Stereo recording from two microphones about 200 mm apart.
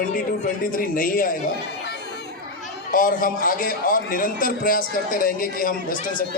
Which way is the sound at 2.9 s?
45° left (ahead or behind).